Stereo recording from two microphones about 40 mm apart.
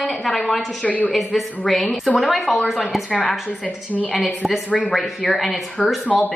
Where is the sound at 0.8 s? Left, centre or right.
Left.